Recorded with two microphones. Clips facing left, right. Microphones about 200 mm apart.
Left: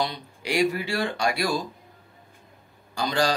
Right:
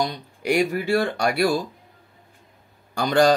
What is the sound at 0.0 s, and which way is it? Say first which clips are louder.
Speech: right 3 dB; 45° right (ahead or behind).